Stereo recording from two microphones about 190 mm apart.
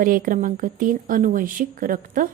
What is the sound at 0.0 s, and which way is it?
A woman's voice, 45° right (ahead or behind).